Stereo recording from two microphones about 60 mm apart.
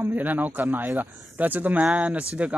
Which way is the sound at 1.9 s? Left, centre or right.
Centre.